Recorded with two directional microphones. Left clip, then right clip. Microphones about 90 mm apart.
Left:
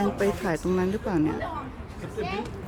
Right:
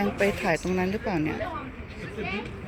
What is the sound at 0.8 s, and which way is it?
Speech, 35° left (ahead or behind).